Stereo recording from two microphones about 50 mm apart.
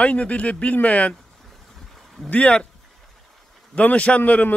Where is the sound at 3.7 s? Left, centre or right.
Left.